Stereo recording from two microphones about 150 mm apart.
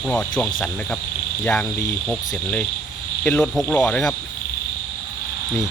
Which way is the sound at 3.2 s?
5° left (ahead or behind).